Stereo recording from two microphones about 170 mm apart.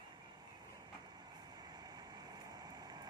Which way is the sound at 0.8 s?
25° right (ahead or behind).